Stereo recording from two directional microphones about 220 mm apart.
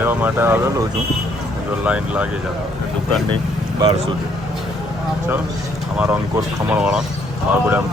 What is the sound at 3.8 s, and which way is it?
Speech, 30° right (ahead or behind).